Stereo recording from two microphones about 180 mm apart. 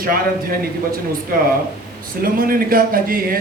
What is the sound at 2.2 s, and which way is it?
A man's voice, 55° right (ahead or behind).